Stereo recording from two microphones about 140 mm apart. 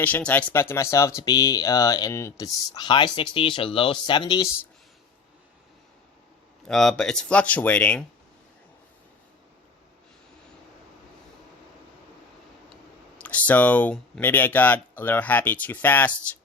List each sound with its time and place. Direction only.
0.0 s speech: 10° left (ahead or behind); by 4.5 s 30° left (ahead or behind)
6.7 s speech: 5° left (ahead or behind)
13.1 s speech: 10° left (ahead or behind)